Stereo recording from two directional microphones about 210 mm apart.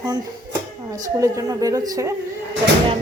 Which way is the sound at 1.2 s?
15° right (ahead or behind).